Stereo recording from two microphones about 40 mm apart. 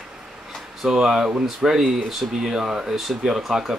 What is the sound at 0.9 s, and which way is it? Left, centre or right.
Speech, centre.